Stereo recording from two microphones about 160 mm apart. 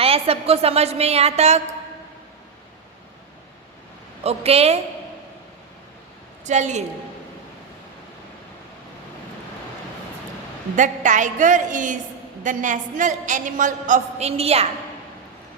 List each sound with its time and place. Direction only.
0.0 s a woman's voice: 40° right (ahead or behind)
4.2 s a woman's voice: 40° right (ahead or behind)
6.4 s a woman's voice: 45° right (ahead or behind)
10.8 s a man's voice: 50° right (ahead or behind)